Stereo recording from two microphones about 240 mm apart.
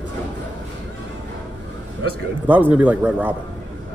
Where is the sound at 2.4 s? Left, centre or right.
Centre.